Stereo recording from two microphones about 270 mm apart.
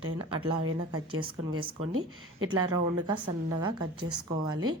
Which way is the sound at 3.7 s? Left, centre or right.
Right.